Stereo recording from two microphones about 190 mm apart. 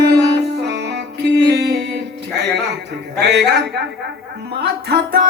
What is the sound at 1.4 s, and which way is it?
Music, 60° right (ahead or behind).